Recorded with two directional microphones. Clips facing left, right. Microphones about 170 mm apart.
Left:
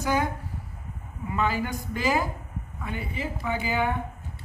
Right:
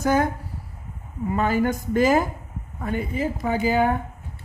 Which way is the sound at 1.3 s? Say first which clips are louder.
Right 6 dB; 45° right (ahead or behind).